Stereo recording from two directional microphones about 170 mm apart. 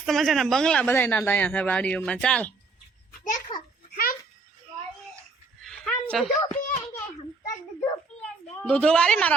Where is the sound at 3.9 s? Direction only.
60° left (ahead or behind).